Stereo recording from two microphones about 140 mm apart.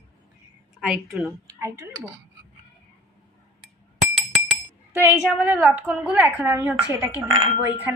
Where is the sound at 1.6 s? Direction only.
20° right (ahead or behind).